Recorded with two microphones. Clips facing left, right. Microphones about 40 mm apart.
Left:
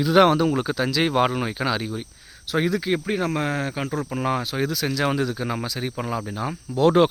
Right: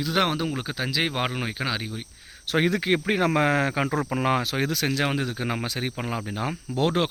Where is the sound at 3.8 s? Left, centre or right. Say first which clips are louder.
Right 1 dB; right.